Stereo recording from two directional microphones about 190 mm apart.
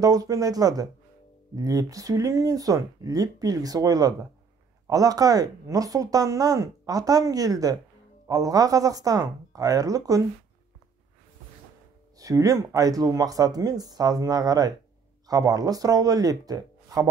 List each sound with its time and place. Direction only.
0.0 s speech: 20° right (ahead or behind)
12.2 s speech: 20° right (ahead or behind)